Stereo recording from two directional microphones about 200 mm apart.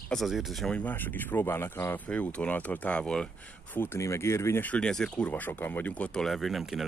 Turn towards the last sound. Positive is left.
turn(degrees=0)  # may be behind; listen again after turning